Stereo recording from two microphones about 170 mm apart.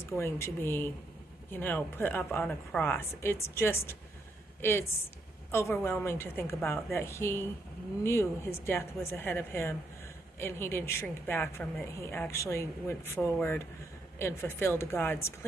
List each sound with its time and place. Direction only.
0.1 s a woman's voice: 15° left (ahead or behind)